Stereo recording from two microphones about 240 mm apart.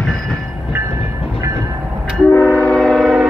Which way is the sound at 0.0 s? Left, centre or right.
Centre.